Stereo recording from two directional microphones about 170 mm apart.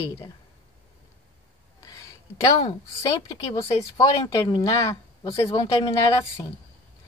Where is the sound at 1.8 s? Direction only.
20° left (ahead or behind).